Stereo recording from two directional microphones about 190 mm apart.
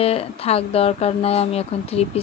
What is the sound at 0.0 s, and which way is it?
Speech, 30° left (ahead or behind).